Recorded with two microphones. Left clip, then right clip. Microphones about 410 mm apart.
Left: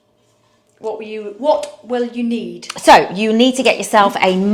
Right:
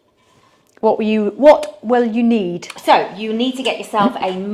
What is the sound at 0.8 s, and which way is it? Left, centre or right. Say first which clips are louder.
Speech: right 9 dB; right.